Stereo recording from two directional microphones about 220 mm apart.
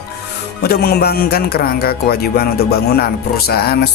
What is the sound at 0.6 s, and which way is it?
Speech, 45° left (ahead or behind).